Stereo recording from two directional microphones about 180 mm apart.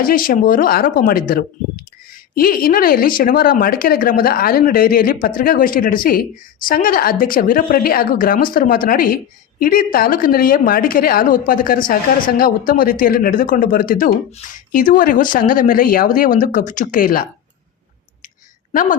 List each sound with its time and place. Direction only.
0.0 s speech: 50° left (ahead or behind)
18.7 s a woman's voice: 50° left (ahead or behind)